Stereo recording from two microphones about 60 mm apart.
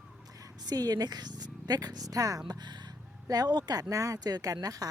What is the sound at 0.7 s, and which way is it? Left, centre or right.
Speech, right.